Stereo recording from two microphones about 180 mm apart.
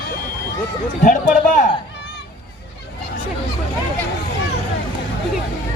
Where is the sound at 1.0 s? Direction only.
45° left (ahead or behind).